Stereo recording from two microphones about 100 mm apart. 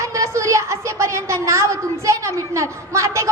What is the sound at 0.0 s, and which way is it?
A woman's voice, 30° right (ahead or behind).